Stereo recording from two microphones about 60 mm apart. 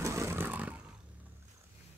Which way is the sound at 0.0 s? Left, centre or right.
Right.